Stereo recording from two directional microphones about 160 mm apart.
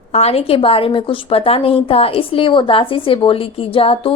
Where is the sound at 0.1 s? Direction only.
40° left (ahead or behind).